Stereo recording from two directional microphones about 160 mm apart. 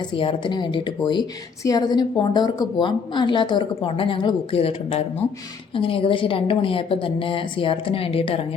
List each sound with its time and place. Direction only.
0.0 s a woman's voice: 30° left (ahead or behind)